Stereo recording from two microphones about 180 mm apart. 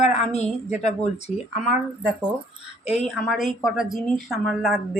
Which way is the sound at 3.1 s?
Centre (ahead or behind).